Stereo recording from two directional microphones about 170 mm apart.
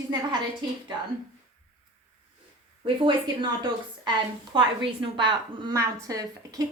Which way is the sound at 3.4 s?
25° right (ahead or behind).